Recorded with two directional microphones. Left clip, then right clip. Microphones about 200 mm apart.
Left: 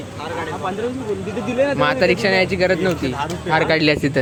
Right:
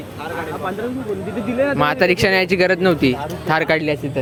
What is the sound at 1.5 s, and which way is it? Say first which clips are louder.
Speech: even; 15° right (ahead or behind).